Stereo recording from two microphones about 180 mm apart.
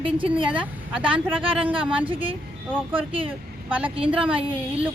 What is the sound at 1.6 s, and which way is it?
A woman's voice, 30° right (ahead or behind).